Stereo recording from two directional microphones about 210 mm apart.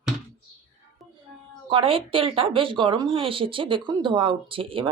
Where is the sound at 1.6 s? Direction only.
25° right (ahead or behind).